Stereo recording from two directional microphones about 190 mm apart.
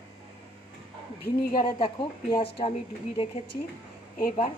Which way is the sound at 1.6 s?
25° left (ahead or behind).